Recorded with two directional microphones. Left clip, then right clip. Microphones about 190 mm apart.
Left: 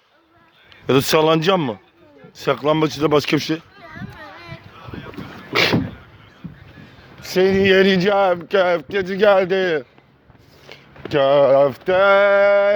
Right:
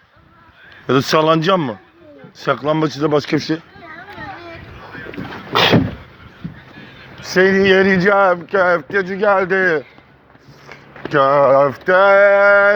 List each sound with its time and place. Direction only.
0.9 s a man's voice: 40° left (ahead or behind)
5.5 s a sound: 35° left (ahead or behind)
7.2 s speech: 40° left (ahead or behind); by 9.6 s 65° left (ahead or behind)
11.1 s speech: 45° left (ahead or behind)